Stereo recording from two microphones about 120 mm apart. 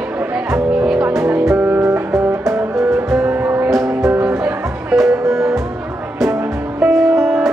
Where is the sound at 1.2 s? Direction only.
20° right (ahead or behind).